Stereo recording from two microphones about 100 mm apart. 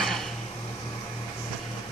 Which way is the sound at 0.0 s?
5° left (ahead or behind).